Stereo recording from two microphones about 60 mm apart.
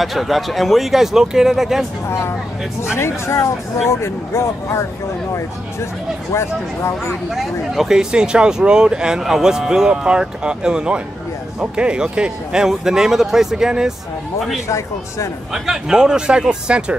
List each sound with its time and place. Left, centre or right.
0.0 s speech: centre
2.0 s speech: left
6.3 s speech: left
7.3 s speech: centre
15.5 s speech: centre